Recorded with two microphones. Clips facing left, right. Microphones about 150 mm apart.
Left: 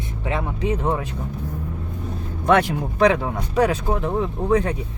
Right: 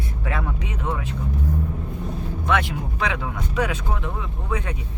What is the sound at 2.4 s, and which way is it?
Speech, 40° left (ahead or behind).